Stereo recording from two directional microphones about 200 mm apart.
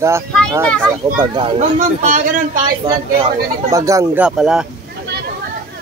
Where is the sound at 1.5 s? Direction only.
40° right (ahead or behind).